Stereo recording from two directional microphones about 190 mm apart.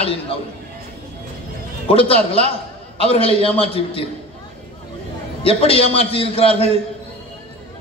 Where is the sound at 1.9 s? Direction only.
30° left (ahead or behind).